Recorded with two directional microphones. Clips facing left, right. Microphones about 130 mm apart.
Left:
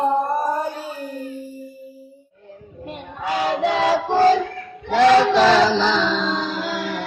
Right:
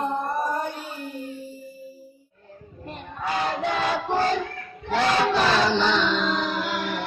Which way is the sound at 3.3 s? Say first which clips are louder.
Left 6 dB; 80° left.